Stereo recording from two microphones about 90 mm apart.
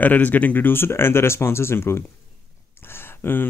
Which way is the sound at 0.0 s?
20° left (ahead or behind).